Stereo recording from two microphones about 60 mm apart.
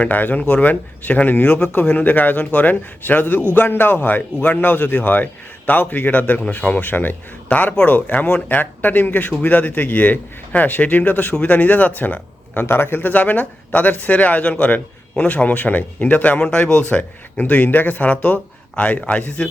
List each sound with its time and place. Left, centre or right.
0.0 s a man's voice: left
7.4 s speech: left